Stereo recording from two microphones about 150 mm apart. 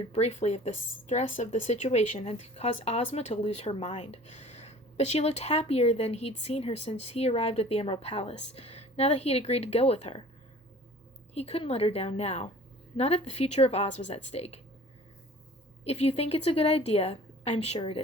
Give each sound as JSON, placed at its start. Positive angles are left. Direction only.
{"t": 0.0, "sound": "speech", "side_deg": 45}
{"t": 11.3, "sound": "speech", "side_deg": 40}
{"t": 15.8, "sound": "speech", "side_deg": 45}